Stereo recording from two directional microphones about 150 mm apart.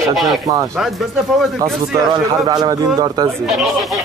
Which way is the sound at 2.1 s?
25° right (ahead or behind).